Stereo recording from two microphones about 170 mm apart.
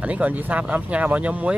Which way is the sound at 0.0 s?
10° right (ahead or behind).